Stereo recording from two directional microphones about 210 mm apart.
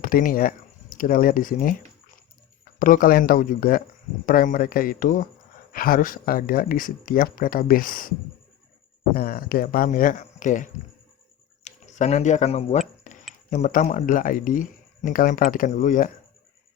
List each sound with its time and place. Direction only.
0.0 s speech: 40° left (ahead or behind)
2.7 s speech: 40° left (ahead or behind)
9.1 s speech: 45° left (ahead or behind)
13.1 s a sound: 35° left (ahead or behind)
13.5 s speech: 40° left (ahead or behind)